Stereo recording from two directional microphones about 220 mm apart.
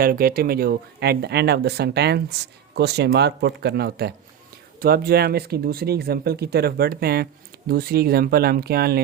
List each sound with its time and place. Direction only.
0.0 s speech: 40° right (ahead or behind)